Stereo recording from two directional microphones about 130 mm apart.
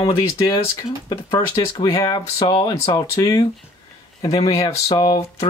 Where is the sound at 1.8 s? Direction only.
25° left (ahead or behind).